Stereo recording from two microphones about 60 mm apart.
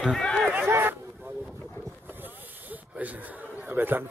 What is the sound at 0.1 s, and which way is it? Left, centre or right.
Run, centre.